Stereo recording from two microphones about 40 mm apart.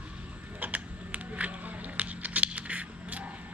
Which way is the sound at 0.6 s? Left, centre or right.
Right.